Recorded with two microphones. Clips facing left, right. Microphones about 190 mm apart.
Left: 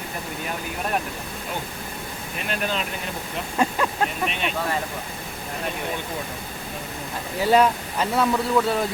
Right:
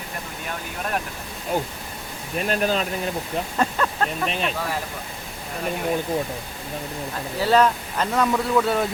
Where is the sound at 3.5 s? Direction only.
10° left (ahead or behind).